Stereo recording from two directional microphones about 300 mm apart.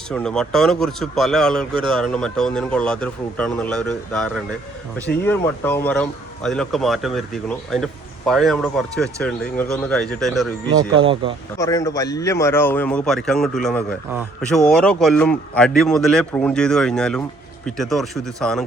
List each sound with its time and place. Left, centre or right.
0.1 s speech: centre
11.0 s speech: centre
11.5 s speech: centre